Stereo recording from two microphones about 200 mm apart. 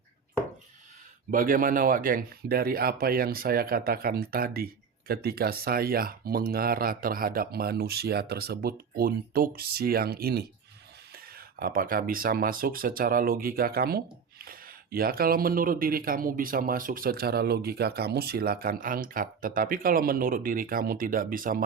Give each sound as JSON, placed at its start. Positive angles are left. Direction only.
{"t": 1.3, "sound": "speech", "side_deg": -45}